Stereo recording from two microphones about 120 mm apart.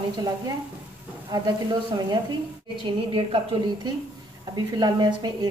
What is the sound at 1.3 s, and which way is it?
A woman's voice, 35° right (ahead or behind).